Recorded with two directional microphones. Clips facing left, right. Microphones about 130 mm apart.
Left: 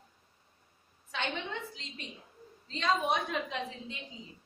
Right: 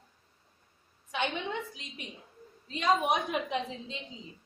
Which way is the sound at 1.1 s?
15° right (ahead or behind).